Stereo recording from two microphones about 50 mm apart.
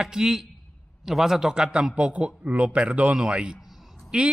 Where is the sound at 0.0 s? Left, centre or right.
Centre.